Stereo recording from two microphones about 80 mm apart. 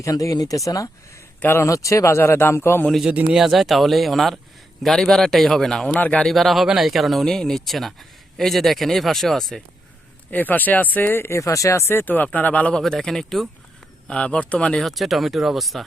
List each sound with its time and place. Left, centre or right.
0.0 s speech: left
1.4 s speech: left
1.7 s speech: left
3.1 s a man's voice: centre
6.0 s speech: centre
6.2 s a man's voice: centre
10.3 s a man's voice: left
14.8 s a man's voice: centre